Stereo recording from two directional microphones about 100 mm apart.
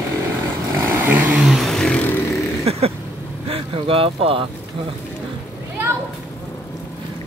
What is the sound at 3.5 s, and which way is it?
Speech, 65° right (ahead or behind).